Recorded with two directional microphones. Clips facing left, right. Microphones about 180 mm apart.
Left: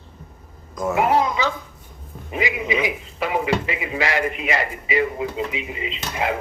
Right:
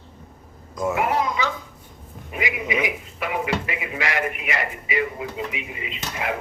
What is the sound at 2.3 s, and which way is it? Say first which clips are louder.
Speech: left 3 dB; 30° left (ahead or behind).